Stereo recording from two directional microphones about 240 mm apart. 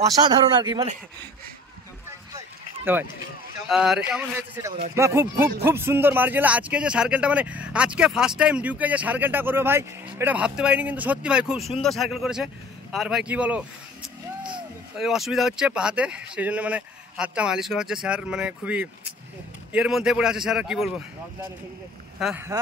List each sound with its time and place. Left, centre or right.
0.0 s speech: centre
2.0 s a sound: centre
3.6 s speech: centre
22.2 s speech: centre